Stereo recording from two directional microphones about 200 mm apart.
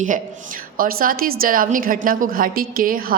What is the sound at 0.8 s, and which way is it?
A woman's voice, 45° right (ahead or behind).